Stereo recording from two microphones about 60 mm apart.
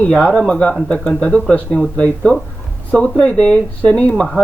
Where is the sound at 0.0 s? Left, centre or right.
Centre.